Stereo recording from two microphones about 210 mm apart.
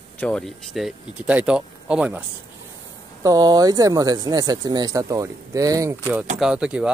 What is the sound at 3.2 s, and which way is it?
Speech, 20° right (ahead or behind).